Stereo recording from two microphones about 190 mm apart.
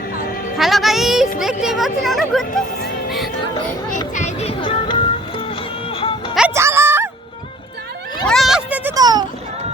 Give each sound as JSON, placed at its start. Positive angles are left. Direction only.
{"t": 0.5, "sound": "music", "side_deg": 0}
{"t": 1.4, "sound": "speech", "side_deg": 0}
{"t": 4.1, "sound": "speech", "side_deg": 35}
{"t": 5.9, "sound": "music", "side_deg": 30}
{"t": 6.5, "sound": "music", "side_deg": -15}
{"t": 8.3, "sound": "a sound", "side_deg": 0}
{"t": 9.0, "sound": "a sound", "side_deg": -20}